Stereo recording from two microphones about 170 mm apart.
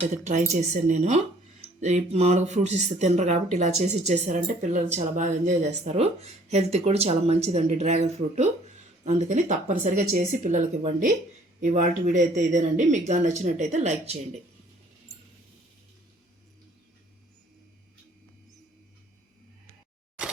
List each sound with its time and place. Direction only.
0.1 s speech: 45° right (ahead or behind)